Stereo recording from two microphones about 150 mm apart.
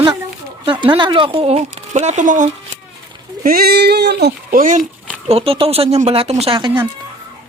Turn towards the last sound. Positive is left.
turn(degrees=-35)  # may be behind; listen again after turning